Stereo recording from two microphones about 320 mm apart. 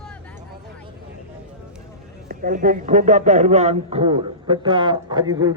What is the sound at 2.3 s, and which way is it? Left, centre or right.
A man's voice, right.